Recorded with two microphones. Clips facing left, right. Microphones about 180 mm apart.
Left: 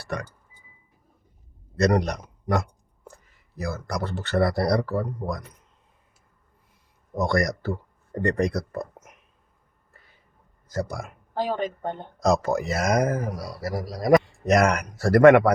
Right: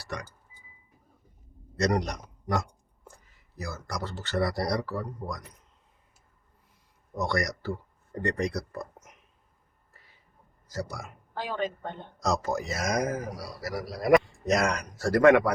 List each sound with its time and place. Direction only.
0.0 s speech: 55° left (ahead or behind)
1.8 s speech: 60° left (ahead or behind)
7.2 s speech: 50° left (ahead or behind)
10.7 s speech: 50° left (ahead or behind)
13.7 s a man's voice: 40° left (ahead or behind)
14.4 s speech: 65° left (ahead or behind)